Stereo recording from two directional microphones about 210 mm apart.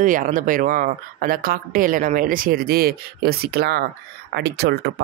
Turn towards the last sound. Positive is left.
turn(degrees=-50)  # may be behind; listen again after turning